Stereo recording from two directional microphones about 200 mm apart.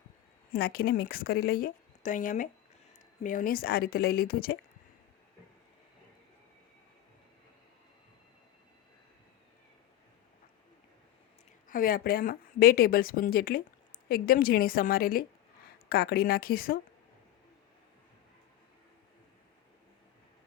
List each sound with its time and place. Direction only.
0.5 s a woman's voice: 50° left (ahead or behind)
11.7 s a woman's voice: 45° left (ahead or behind)